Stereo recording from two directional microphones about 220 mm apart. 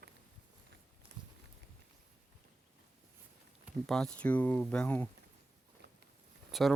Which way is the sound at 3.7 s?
Centre (ahead or behind).